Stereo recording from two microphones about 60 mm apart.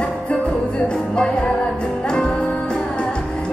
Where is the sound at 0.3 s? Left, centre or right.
Centre.